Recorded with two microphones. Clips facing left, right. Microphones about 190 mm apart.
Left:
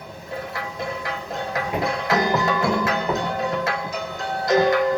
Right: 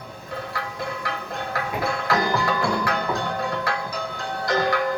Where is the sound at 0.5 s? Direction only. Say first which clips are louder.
Left 1 dB; 20° left (ahead or behind).